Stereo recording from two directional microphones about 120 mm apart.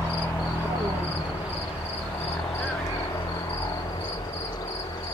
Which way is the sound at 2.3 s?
20° left (ahead or behind).